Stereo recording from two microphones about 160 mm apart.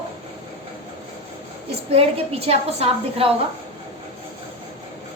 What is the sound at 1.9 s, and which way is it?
A woman's voice, 40° right (ahead or behind).